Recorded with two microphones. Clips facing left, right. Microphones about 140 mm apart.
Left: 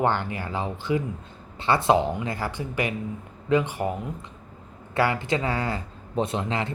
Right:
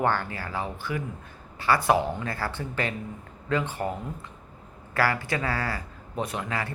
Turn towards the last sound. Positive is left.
turn(degrees=25)  # may be behind; listen again after turning